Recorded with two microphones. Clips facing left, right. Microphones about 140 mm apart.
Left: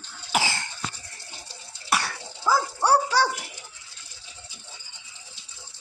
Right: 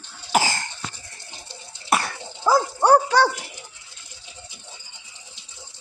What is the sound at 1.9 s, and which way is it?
Cough, 45° right (ahead or behind).